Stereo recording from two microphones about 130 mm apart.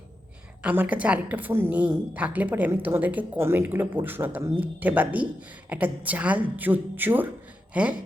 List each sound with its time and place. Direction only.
0.6 s a woman's voice: 10° right (ahead or behind)